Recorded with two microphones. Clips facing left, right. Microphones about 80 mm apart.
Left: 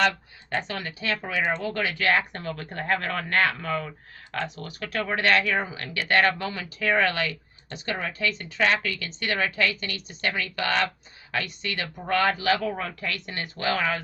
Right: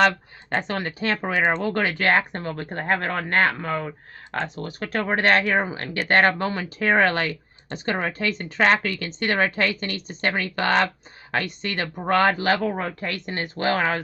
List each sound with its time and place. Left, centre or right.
0.5 s speech: right